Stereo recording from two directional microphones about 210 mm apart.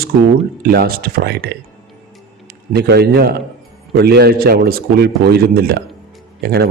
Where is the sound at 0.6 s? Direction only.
45° right (ahead or behind).